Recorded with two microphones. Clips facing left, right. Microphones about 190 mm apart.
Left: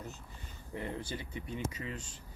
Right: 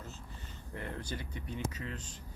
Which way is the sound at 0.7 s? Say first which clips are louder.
Left 2 dB; 10° left (ahead or behind).